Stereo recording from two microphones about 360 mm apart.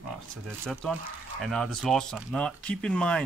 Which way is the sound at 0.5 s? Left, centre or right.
Centre.